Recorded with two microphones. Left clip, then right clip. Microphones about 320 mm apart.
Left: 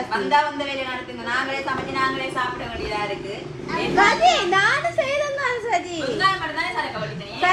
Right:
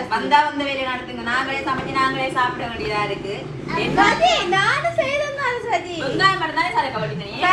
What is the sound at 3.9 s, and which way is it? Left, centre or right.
A child's voice, left.